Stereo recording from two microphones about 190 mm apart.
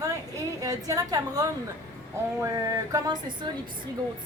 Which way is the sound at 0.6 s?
20° right (ahead or behind).